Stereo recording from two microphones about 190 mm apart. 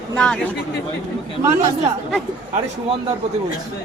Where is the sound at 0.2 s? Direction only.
5° left (ahead or behind).